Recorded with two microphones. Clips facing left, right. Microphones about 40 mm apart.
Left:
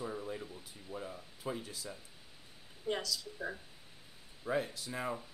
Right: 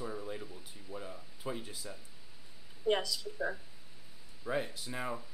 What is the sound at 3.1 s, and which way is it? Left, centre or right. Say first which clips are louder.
Speech: right 3 dB; centre.